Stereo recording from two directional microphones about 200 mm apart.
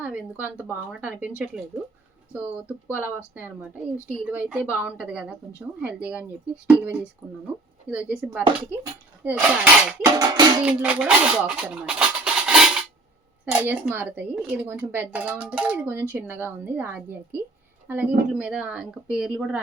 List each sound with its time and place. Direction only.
0.0 s speech: 10° right (ahead or behind)
2.3 s speech: 10° right (ahead or behind)
10.0 s music: 20° right (ahead or behind)
10.7 s a woman's voice: 5° right (ahead or behind)